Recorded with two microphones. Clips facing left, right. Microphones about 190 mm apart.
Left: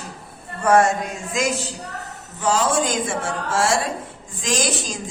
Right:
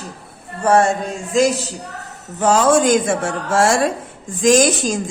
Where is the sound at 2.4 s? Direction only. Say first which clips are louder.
Right 6 dB; 50° right (ahead or behind).